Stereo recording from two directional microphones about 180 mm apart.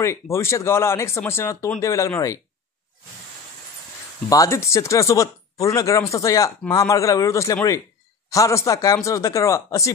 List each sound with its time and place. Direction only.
0.0 s speech: 15° left (ahead or behind)
4.3 s speech: 15° left (ahead or behind)